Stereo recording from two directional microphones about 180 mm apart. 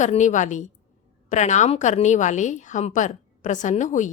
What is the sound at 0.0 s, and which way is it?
A woman's voice, 45° left (ahead or behind).